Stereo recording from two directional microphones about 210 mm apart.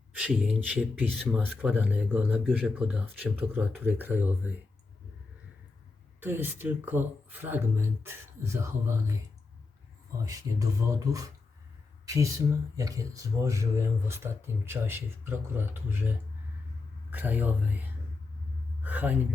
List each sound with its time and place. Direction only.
0.2 s speech: 5° right (ahead or behind)
6.1 s a man's voice: 10° right (ahead or behind)